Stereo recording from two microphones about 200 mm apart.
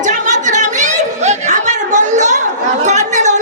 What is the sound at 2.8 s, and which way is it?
Chatter, 35° right (ahead or behind).